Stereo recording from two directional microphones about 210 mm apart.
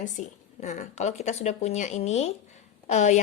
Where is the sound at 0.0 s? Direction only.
35° left (ahead or behind).